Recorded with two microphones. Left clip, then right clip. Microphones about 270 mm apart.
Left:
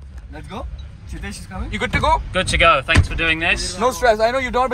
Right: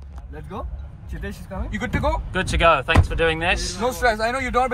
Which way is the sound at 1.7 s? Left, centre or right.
Centre.